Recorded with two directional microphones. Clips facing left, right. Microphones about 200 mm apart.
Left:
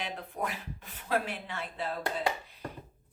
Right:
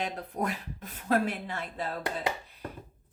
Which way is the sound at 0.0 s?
40° right (ahead or behind).